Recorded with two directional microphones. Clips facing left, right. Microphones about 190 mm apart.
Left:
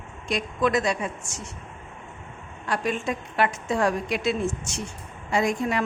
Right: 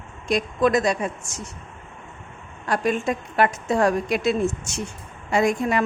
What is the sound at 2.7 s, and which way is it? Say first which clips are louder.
A woman's voice: right 4 dB; 45° right (ahead or behind).